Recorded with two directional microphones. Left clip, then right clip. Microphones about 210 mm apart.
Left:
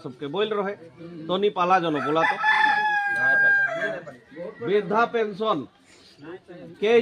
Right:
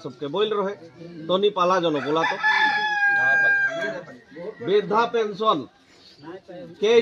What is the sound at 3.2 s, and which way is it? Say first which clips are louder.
Speech: left 1 dB; 55° left (ahead or behind).